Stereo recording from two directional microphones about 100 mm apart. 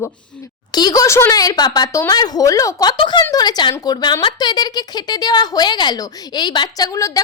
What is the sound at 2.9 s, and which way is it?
Speech, 55° left (ahead or behind).